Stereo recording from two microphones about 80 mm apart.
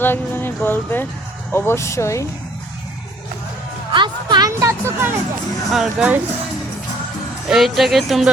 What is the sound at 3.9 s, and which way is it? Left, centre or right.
Speech, right.